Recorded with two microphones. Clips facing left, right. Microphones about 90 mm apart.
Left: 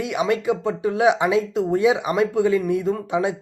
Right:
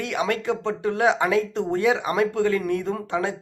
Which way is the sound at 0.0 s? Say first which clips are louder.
Left 3 dB; 10° left (ahead or behind).